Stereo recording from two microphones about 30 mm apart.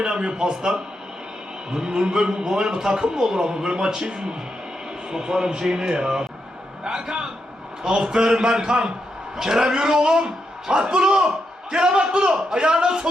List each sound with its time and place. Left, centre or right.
0.0 s a man's voice: right